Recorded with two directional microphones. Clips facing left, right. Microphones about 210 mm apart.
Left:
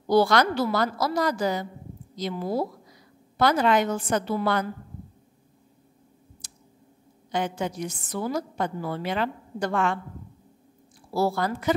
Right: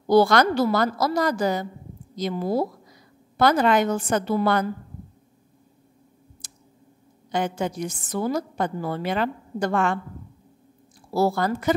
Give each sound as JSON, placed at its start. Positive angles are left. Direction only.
{"t": 0.1, "sound": "a woman's voice", "side_deg": -45}
{"t": 7.3, "sound": "a woman's voice", "side_deg": -45}
{"t": 11.1, "sound": "a woman's voice", "side_deg": -45}